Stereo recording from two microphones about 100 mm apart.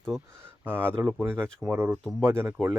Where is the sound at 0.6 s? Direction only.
20° right (ahead or behind).